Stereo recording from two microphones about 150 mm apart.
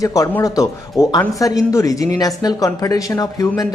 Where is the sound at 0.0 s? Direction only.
20° left (ahead or behind).